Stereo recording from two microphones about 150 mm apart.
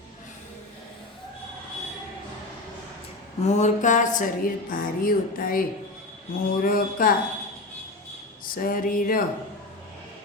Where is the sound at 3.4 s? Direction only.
50° left (ahead or behind); by 5.6 s 70° left (ahead or behind).